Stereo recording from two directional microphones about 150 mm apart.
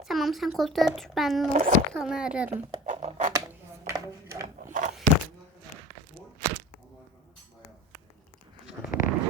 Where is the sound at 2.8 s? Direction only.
50° right (ahead or behind).